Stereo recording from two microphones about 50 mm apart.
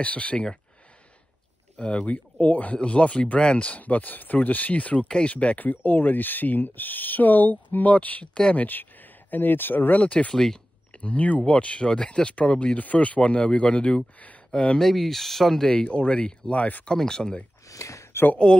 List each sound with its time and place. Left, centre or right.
0.0 s speech: left
1.8 s speech: left
9.9 s speech: left
10.3 s speech: centre
10.9 s speech: left
14.8 s speech: centre
15.7 s speech: centre
16.8 s speech: centre
17.7 s speech: left
18.1 s speech: left